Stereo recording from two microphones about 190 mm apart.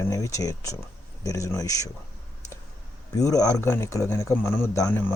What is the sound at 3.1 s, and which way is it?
Speech, 20° left (ahead or behind).